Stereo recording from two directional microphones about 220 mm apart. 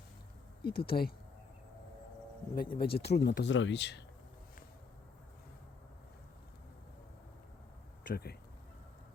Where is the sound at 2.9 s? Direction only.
50° left (ahead or behind).